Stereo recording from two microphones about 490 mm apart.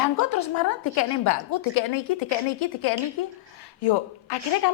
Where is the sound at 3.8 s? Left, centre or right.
Left.